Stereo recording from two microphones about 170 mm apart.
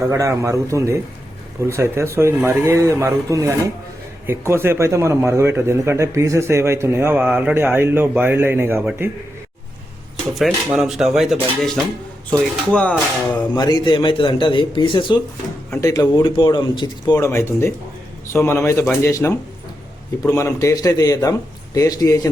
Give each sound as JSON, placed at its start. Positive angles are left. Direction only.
{"t": 0.1, "sound": "speech", "side_deg": -20}
{"t": 10.3, "sound": "speech", "side_deg": 0}
{"t": 13.6, "sound": "speech", "side_deg": 25}